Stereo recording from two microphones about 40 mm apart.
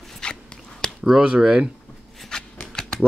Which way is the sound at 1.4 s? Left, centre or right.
Centre.